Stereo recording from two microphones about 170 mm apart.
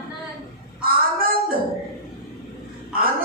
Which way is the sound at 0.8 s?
60° right (ahead or behind).